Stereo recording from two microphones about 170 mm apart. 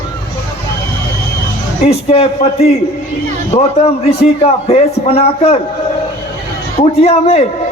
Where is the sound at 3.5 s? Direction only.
35° left (ahead or behind).